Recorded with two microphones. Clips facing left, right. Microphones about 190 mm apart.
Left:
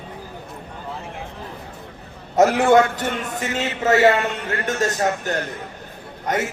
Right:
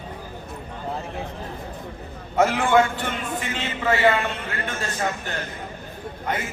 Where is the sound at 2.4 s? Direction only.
40° left (ahead or behind).